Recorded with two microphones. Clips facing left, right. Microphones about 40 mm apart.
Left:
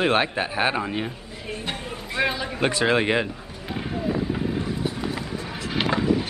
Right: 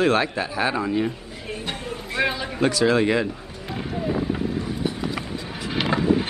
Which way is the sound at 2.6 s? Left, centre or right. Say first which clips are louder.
Right 2 dB; left.